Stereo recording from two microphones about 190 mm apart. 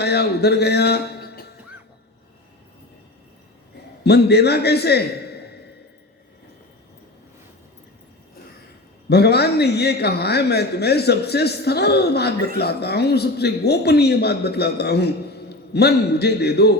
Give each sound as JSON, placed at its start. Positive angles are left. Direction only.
{"t": 0.0, "sound": "speech", "side_deg": 60}
{"t": 4.0, "sound": "a man's voice", "side_deg": 60}
{"t": 9.0, "sound": "a man's voice", "side_deg": 60}